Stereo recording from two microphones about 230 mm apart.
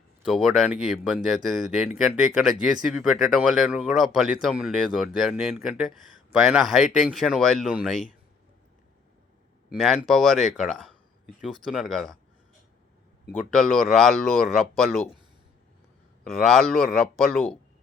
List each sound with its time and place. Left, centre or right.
0.2 s speech: centre
9.6 s speech: centre
13.5 s speech: centre
16.3 s speech: centre